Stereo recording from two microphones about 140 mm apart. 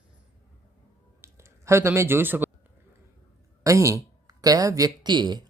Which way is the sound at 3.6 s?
20° right (ahead or behind).